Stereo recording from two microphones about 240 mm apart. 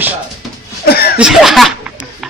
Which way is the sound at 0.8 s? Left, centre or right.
Left.